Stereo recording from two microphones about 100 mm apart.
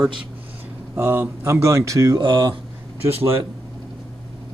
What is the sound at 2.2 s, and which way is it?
Speech, 55° right (ahead or behind).